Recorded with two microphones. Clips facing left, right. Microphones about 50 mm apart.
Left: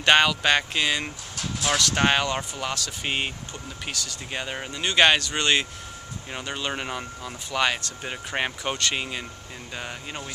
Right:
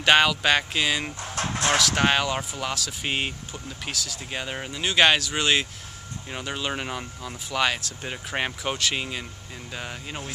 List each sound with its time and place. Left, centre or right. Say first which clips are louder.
0.0 s speech: even; centre
1.3 s a sound: right 3 dB; right
1.8 s speech: left 2 dB; centre